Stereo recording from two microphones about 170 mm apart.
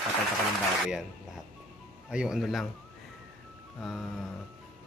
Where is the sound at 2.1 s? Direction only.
5° right (ahead or behind).